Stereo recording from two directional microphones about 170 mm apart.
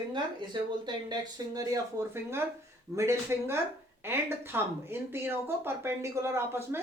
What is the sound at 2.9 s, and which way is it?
Speech, 15° right (ahead or behind).